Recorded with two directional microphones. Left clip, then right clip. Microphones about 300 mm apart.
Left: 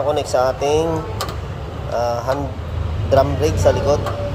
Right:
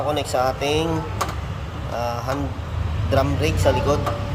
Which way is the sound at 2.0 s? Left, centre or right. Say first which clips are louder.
Left 6 dB; centre.